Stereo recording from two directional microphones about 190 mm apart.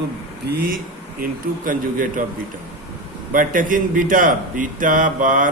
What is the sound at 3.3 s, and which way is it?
A man's voice, 45° right (ahead or behind).